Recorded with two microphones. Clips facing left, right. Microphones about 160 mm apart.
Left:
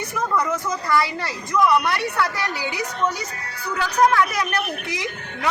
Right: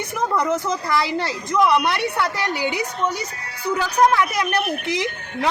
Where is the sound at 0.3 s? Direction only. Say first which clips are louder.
Right 2 dB; 20° right (ahead or behind).